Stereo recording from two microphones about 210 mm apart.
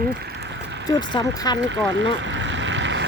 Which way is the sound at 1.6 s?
60° right (ahead or behind).